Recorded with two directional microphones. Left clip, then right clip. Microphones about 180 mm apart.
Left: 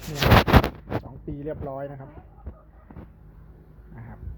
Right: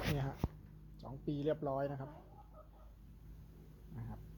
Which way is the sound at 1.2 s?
15° right (ahead or behind).